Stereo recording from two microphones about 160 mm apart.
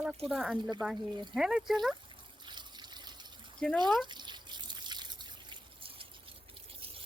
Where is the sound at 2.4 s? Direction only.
30° right (ahead or behind).